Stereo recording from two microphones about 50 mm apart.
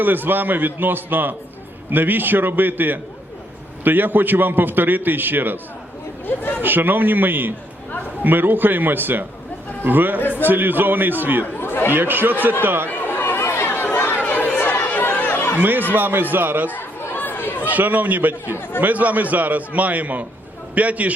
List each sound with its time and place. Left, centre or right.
0.0 s a man's voice: right
6.2 s speech: left
6.6 s a man's voice: right
10.2 s speech: left
10.4 s a man's voice: right
11.5 s chatter: left
11.9 s speech: right
12.9 s chatter: left
15.5 s a man's voice: right
16.6 s chatter: left
17.7 s a man's voice: right